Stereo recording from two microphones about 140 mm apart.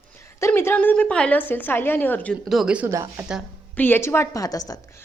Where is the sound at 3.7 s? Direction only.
15° left (ahead or behind).